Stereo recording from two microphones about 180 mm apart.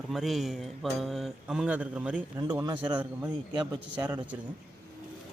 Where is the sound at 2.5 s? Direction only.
20° right (ahead or behind).